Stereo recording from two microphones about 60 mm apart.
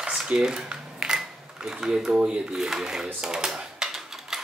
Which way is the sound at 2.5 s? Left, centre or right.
Centre.